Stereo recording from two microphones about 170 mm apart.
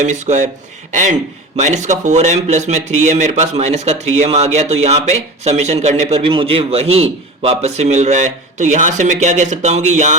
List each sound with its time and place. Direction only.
0.0 s a man's voice: 45° right (ahead or behind)